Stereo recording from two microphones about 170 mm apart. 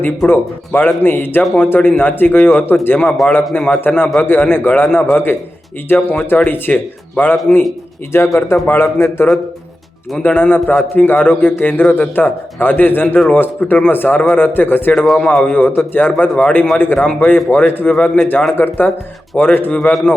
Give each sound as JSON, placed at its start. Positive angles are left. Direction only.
{"t": 0.3, "sound": "a man's voice", "side_deg": 10}
{"t": 7.5, "sound": "a man's voice", "side_deg": 0}
{"t": 8.1, "sound": "a man's voice", "side_deg": 15}